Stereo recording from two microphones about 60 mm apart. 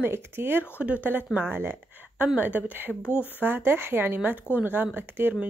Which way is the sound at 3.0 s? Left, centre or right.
Left.